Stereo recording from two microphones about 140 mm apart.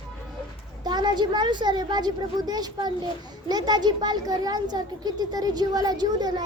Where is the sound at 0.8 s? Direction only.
30° right (ahead or behind).